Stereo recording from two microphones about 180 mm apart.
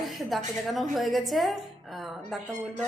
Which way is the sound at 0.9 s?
Centre (ahead or behind).